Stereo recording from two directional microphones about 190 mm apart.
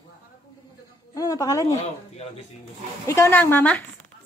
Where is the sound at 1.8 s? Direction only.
35° left (ahead or behind).